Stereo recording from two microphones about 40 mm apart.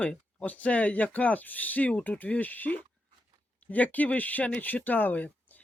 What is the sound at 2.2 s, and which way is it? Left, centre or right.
Speech, left.